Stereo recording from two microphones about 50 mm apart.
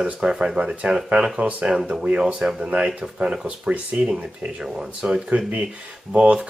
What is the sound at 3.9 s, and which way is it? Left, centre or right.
Speech, right.